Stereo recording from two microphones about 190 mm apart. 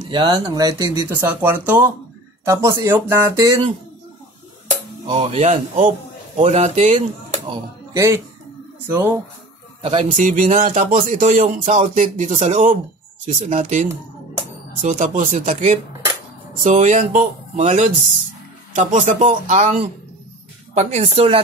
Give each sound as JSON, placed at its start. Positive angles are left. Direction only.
{"t": 0.1, "sound": "speech", "side_deg": -20}
{"t": 5.0, "sound": "a man's voice", "side_deg": -30}
{"t": 7.5, "sound": "speech", "side_deg": -15}
{"t": 9.8, "sound": "speech", "side_deg": -30}
{"t": 10.0, "sound": "speech", "side_deg": -45}